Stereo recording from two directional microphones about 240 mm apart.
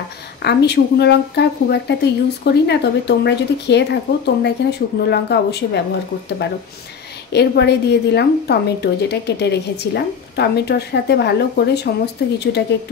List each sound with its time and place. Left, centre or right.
0.4 s speech: left
7.3 s speech: left